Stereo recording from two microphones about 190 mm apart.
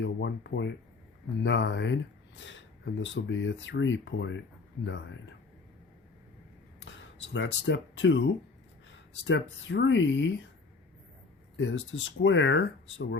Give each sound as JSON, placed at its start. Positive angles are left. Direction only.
{"t": 0.0, "sound": "speech", "side_deg": 70}
{"t": 6.8, "sound": "speech", "side_deg": 70}
{"t": 9.2, "sound": "speech", "side_deg": 75}
{"t": 11.5, "sound": "speech", "side_deg": 75}